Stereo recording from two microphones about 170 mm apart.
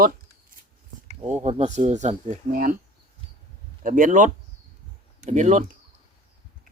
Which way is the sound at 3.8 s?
50° right (ahead or behind).